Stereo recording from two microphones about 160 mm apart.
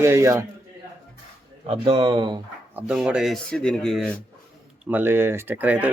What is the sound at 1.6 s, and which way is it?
Speech, 35° right (ahead or behind).